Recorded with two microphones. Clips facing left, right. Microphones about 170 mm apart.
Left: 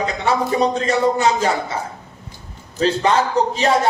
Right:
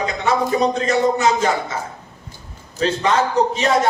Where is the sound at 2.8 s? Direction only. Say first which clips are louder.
Left 1 dB; 30° left (ahead or behind).